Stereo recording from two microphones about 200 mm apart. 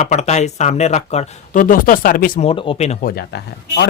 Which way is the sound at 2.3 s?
30° left (ahead or behind).